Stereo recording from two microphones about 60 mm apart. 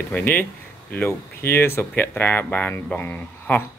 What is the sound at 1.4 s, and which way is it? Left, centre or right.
Speech, left.